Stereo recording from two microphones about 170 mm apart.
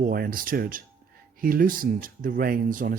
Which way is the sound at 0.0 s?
60° right (ahead or behind).